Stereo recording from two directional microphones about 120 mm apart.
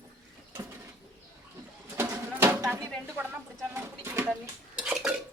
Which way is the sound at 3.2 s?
15° right (ahead or behind).